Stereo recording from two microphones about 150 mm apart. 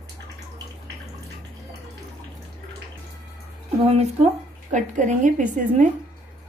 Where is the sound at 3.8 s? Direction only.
45° right (ahead or behind).